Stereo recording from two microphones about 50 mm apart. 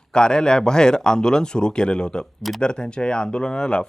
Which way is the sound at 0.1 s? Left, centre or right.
Centre.